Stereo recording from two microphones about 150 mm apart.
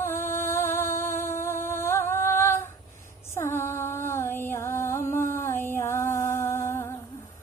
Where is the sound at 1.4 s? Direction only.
15° left (ahead or behind).